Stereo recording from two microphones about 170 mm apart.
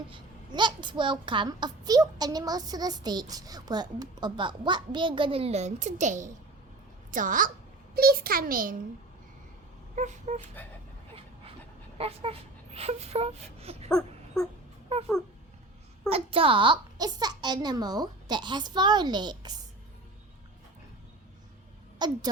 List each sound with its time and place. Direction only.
0.1 s a child's voice: 25° right (ahead or behind); by 7.5 s 50° right (ahead or behind)
7.9 s a child's voice: 65° right (ahead or behind)
9.9 s a sound: 45° right (ahead or behind)
10.4 s speech: 10° left (ahead or behind)
11.9 s speech: 35° right (ahead or behind)
14.4 s wail: 5° left (ahead or behind)
16.0 s a child's voice: 35° right (ahead or behind)
21.9 s a woman's voice: 25° right (ahead or behind)